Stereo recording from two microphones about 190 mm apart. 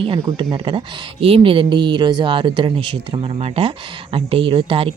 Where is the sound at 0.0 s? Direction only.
25° right (ahead or behind).